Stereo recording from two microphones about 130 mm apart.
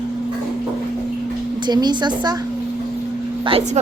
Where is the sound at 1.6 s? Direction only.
35° right (ahead or behind).